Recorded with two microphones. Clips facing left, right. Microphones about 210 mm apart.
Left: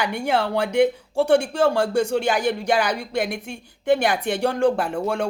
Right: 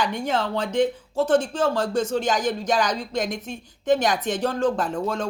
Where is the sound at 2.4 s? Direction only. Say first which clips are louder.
Left 2 dB; 60° left (ahead or behind).